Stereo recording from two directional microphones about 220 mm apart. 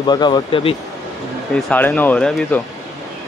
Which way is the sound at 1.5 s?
5° left (ahead or behind).